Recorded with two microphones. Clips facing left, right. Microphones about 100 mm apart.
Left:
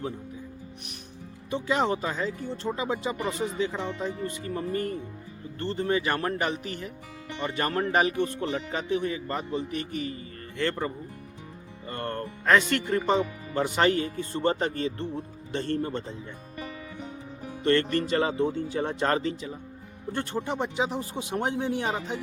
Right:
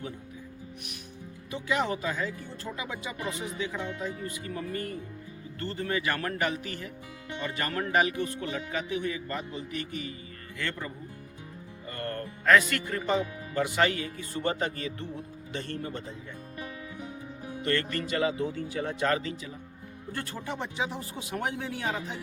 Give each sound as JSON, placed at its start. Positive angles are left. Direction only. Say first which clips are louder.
{"t": 1.5, "sound": "speech", "louder": "left 4 dB", "side_deg": 30}
{"t": 12.5, "sound": "speech", "louder": "left 1 dB", "side_deg": 30}
{"t": 17.7, "sound": "speech", "louder": "left 6 dB", "side_deg": 30}